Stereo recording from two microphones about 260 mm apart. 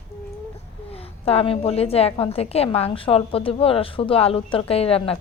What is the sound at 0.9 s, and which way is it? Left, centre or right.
A woman's voice, left.